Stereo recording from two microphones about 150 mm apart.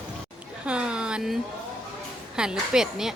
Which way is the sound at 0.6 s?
5° right (ahead or behind).